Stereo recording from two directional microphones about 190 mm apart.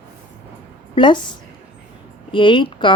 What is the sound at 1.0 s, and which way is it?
Speech, 25° left (ahead or behind).